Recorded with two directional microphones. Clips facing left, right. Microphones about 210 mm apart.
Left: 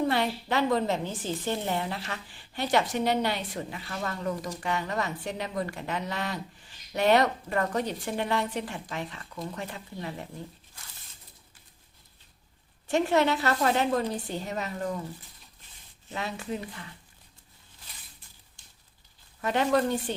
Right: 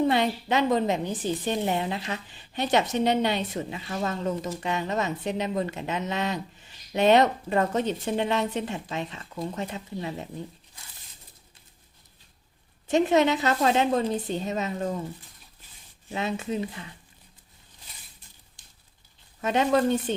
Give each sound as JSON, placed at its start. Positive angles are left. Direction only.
{"t": 0.0, "sound": "a woman's voice", "side_deg": -20}
{"t": 12.9, "sound": "a woman's voice", "side_deg": -20}
{"t": 16.0, "sound": "a woman's voice", "side_deg": -20}
{"t": 19.4, "sound": "a woman's voice", "side_deg": -20}